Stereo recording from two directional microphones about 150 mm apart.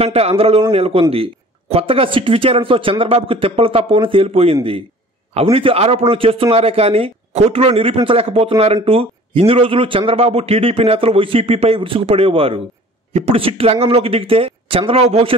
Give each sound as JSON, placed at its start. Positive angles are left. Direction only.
{"t": 0.0, "sound": "a man's voice", "side_deg": -40}